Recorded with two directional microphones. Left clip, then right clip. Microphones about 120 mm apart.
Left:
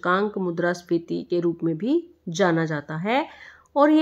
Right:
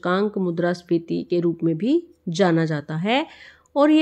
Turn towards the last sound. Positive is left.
turn(degrees=-20)  # may be behind; listen again after turning